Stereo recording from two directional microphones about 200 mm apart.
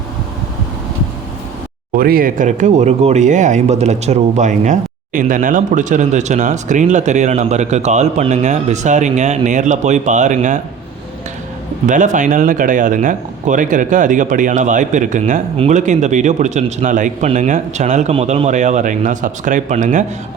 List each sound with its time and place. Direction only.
2.0 s speech: 45° right (ahead or behind)
11.9 s speech: 40° right (ahead or behind)